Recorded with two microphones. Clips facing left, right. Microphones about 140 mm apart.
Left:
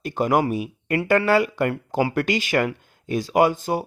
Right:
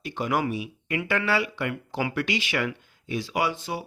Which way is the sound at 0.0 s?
45° left (ahead or behind).